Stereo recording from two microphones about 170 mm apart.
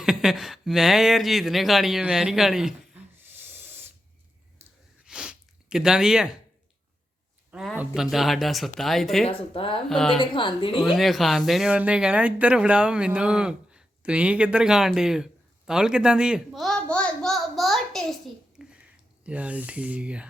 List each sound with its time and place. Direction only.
0.0 s speech: 5° right (ahead or behind)
3.2 s a sound: 15° right (ahead or behind)
5.0 s snort: 5° right (ahead or behind)
7.5 s speech: 5° right (ahead or behind)
9.2 s speech: 30° left (ahead or behind)
9.9 s speech: 5° left (ahead or behind)
10.2 s a woman's voice: 30° left (ahead or behind)
10.9 s speech: centre (ahead or behind)
18.6 s a sound: 5° right (ahead or behind)
19.2 s speech: 5° right (ahead or behind)